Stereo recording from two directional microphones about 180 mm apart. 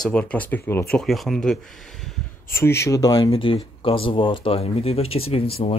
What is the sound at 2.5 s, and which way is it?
Speech, 15° left (ahead or behind).